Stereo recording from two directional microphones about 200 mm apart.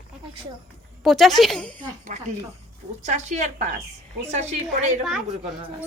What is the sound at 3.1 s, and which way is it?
Speech, 35° right (ahead or behind).